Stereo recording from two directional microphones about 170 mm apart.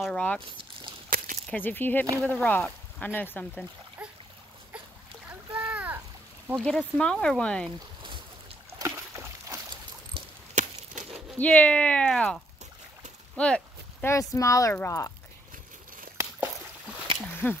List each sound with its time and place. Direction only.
0.0 s speech: 5° left (ahead or behind)
1.1 s a sound: 50° right (ahead or behind)
1.5 s speech: 10° left (ahead or behind)
4.0 s a sound: 5° right (ahead or behind)
5.7 s splash: 10° right (ahead or behind)
6.5 s speech: 5° left (ahead or behind)
8.7 s a sound: 15° right (ahead or behind)
10.5 s a sound: 50° right (ahead or behind)
11.3 s speech: 10° left (ahead or behind)
13.4 s speech: 5° left (ahead or behind)
14.0 s speech: 20° left (ahead or behind)
17.4 s speech: 15° left (ahead or behind)